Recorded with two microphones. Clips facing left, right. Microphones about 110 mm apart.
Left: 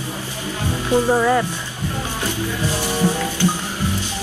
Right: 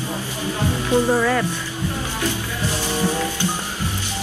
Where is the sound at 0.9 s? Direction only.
25° left (ahead or behind).